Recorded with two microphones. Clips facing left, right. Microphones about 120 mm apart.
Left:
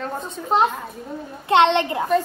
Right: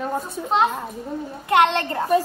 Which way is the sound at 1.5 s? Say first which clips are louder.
Left 2 dB; 25° left (ahead or behind).